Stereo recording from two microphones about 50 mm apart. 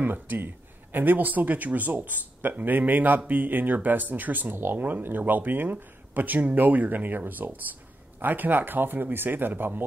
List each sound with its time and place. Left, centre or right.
0.0 s speech: right